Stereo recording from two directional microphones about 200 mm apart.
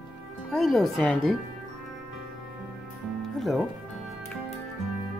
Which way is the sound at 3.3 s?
Centre (ahead or behind).